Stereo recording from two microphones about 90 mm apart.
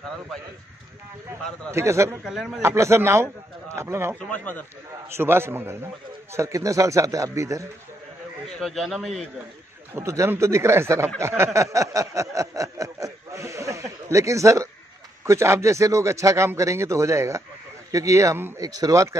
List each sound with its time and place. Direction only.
1.7 s speech: 30° right (ahead or behind)
2.2 s a man's voice: 5° right (ahead or behind)
2.6 s speech: 30° right (ahead or behind)
4.3 s speech: 20° left (ahead or behind)
5.1 s a man's voice: 25° right (ahead or behind)
6.3 s speech: 35° right (ahead or behind)
8.5 s a man's voice: 5° left (ahead or behind)
9.9 s speech: 30° right (ahead or behind)
11.1 s a sound: 30° right (ahead or behind)
15.2 s speech: 30° right (ahead or behind)